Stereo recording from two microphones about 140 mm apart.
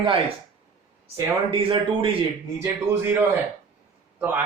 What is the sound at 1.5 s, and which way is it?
Speech, 40° right (ahead or behind).